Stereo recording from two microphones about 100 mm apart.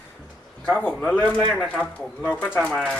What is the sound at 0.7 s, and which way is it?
Speech, 10° left (ahead or behind).